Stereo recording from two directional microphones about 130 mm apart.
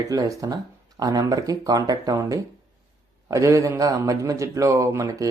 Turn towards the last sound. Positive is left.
turn(degrees=-25)  # may be behind; listen again after turning